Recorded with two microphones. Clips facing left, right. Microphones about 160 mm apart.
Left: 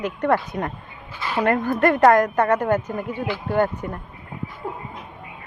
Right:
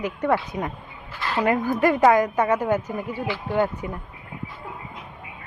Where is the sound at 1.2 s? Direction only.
15° left (ahead or behind).